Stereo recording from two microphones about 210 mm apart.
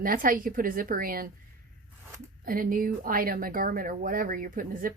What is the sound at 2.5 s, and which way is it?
Speech, 40° right (ahead or behind).